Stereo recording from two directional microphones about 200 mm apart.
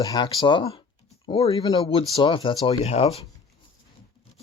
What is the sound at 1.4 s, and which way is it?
Speech, 15° left (ahead or behind).